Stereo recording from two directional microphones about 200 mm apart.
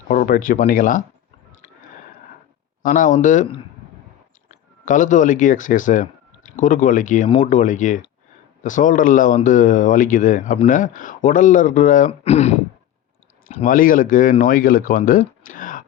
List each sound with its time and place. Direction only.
0.1 s speech: 45° left (ahead or behind)
2.8 s speech: 40° left (ahead or behind)
15.4 s a sound: 45° left (ahead or behind)